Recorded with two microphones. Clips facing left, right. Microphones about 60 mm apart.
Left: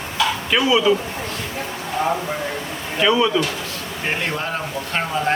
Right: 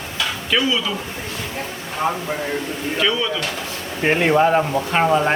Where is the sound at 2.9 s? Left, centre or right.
Centre.